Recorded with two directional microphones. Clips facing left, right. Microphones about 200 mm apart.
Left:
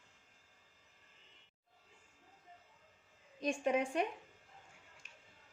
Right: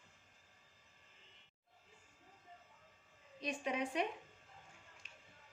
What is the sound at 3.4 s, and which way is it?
Speech, 50° left (ahead or behind).